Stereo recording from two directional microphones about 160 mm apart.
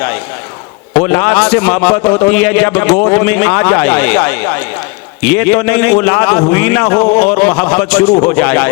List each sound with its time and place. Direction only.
0.9 s a man's voice: 10° left (ahead or behind)
8.1 s speech: 20° left (ahead or behind)
8.4 s a man's voice: 10° left (ahead or behind)